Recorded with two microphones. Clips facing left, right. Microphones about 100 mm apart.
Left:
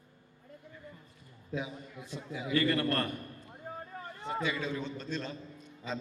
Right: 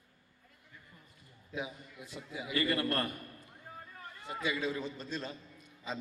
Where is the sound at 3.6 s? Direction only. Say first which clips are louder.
Left 7 dB; 30° left (ahead or behind).